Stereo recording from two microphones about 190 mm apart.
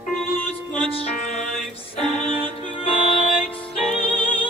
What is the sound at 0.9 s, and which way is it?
Music, 35° left (ahead or behind).